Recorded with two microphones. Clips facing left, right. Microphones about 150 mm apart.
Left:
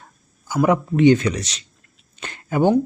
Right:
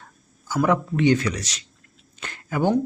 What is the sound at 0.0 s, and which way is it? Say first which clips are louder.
A man's voice: even; 15° left (ahead or behind).